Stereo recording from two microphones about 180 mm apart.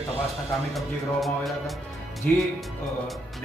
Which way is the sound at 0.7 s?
Centre (ahead or behind).